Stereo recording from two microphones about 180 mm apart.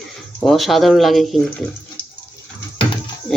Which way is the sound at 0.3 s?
Centre (ahead or behind).